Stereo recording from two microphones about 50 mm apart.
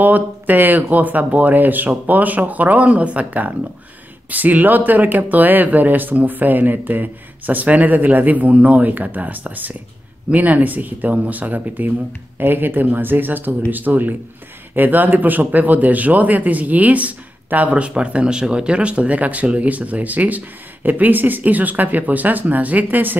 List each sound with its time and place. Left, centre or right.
0.0 s speech: right